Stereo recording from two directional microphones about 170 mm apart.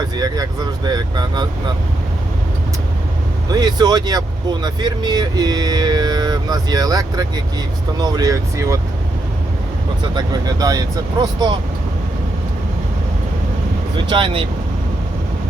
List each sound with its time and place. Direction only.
0.0 s speech: 25° right (ahead or behind)
3.5 s speech: 25° right (ahead or behind)
10.0 s speech: 25° right (ahead or behind)
13.9 s speech: 30° right (ahead or behind)